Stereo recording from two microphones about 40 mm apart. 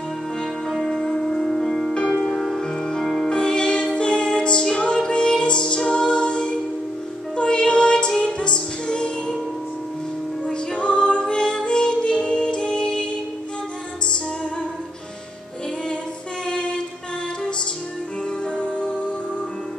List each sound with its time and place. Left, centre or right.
0.7 s music: centre
2.0 s music: left
2.5 s music: centre
10.4 s music: left
16.4 s a sound: left
18.8 s music: left